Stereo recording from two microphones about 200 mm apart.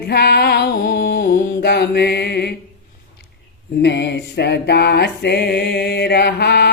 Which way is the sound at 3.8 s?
60° left (ahead or behind).